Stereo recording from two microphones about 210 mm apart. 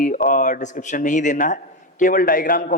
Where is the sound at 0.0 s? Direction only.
40° left (ahead or behind).